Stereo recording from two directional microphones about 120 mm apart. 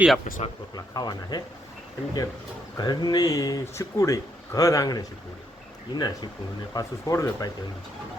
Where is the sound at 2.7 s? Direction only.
35° left (ahead or behind).